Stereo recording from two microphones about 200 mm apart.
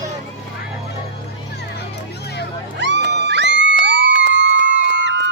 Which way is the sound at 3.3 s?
60° right (ahead or behind).